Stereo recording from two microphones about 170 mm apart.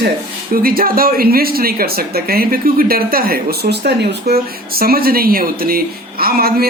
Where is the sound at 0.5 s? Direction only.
60° right (ahead or behind).